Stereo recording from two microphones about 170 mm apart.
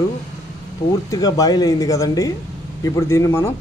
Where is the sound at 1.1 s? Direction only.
20° left (ahead or behind).